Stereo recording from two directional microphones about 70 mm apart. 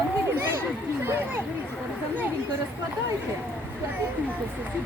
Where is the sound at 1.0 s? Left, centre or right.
Right.